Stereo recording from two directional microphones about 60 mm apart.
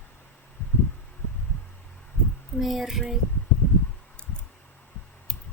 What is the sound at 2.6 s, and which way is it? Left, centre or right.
Speech, centre.